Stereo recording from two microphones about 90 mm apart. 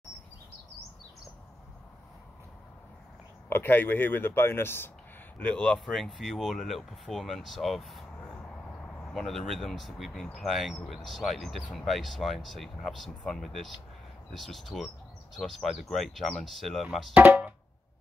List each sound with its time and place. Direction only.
3.4 s speech: 25° left (ahead or behind)
5.4 s speech: 15° left (ahead or behind)
8.2 s a sound: 15° left (ahead or behind); by 10.2 s centre (ahead or behind)
10.3 s speech: centre (ahead or behind)
17.1 s music: 15° right (ahead or behind)